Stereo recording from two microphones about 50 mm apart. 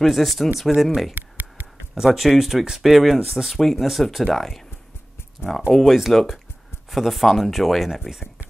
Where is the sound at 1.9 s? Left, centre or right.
Centre.